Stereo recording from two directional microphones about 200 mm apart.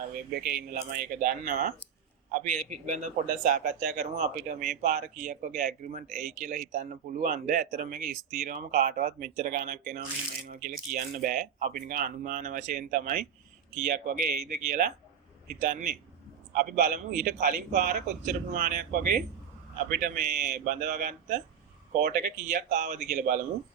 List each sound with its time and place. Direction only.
0.3 s a man's voice: 50° right (ahead or behind)